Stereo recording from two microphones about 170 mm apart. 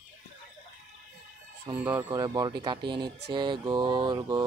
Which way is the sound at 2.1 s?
25° right (ahead or behind).